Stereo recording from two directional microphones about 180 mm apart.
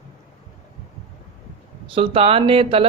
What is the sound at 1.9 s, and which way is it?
Speech, 30° right (ahead or behind).